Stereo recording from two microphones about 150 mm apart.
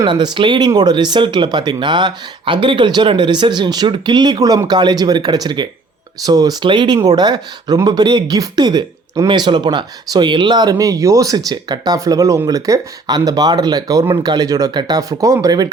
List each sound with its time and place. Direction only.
0.0 s speech: 30° right (ahead or behind)